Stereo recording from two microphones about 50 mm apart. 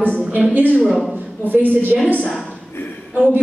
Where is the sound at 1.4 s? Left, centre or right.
Right.